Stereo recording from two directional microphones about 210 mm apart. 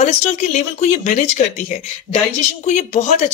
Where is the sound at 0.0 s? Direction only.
30° left (ahead or behind).